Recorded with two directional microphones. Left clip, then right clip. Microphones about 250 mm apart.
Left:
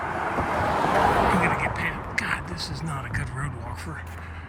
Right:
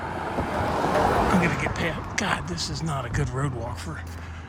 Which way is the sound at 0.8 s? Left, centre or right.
Left.